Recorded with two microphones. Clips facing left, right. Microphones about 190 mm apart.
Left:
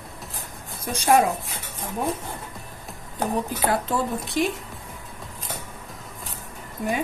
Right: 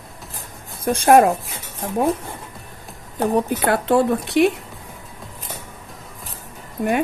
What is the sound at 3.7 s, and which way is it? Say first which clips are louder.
Speech: right 9 dB; 65° right (ahead or behind).